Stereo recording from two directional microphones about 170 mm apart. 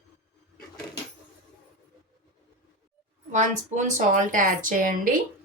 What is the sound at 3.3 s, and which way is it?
A woman's voice, 45° right (ahead or behind).